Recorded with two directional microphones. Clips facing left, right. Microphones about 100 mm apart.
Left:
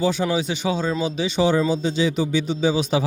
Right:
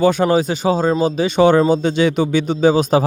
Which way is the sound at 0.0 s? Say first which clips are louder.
Right 7 dB; 50° right (ahead or behind).